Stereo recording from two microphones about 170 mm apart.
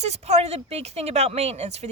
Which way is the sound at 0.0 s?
40° right (ahead or behind).